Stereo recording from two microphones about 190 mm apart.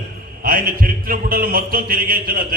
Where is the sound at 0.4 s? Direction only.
50° right (ahead or behind).